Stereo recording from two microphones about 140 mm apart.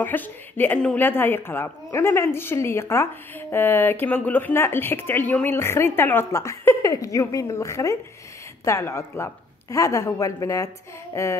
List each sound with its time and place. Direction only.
0.0 s a woman's voice: 15° left (ahead or behind)